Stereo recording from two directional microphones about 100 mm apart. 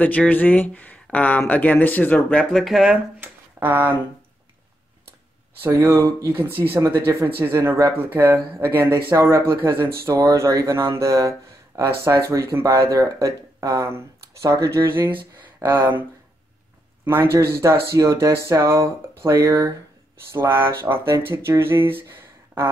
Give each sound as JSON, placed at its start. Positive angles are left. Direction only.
{"t": 0.0, "sound": "speech", "side_deg": 15}
{"t": 2.5, "sound": "speech", "side_deg": 0}
{"t": 3.2, "sound": "a sound", "side_deg": -20}
{"t": 5.9, "sound": "speech", "side_deg": -30}
{"t": 6.3, "sound": "speech", "side_deg": -20}
{"t": 6.8, "sound": "speech", "side_deg": -30}
{"t": 20.3, "sound": "speech", "side_deg": -25}